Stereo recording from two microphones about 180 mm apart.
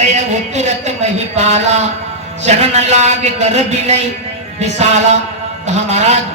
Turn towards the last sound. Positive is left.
turn(degrees=-40)  # may be behind; listen again after turning